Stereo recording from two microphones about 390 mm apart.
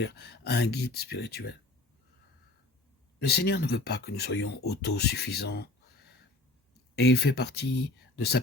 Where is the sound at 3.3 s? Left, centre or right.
Left.